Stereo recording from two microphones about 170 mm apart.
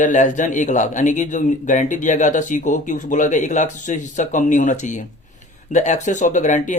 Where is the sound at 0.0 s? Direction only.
45° left (ahead or behind).